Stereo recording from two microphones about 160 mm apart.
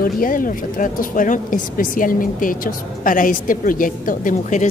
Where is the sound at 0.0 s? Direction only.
60° left (ahead or behind).